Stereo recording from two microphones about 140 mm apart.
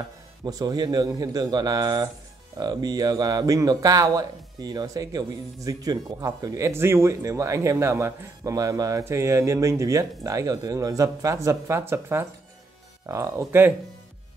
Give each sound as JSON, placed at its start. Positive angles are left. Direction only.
{"t": 0.5, "sound": "speech", "side_deg": -25}